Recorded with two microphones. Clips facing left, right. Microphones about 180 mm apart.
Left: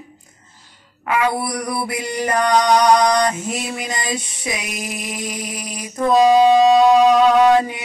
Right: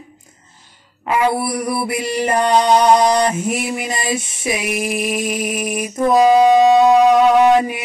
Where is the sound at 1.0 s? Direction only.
25° right (ahead or behind).